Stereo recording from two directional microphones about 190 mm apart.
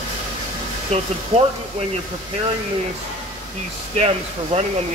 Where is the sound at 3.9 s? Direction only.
35° right (ahead or behind).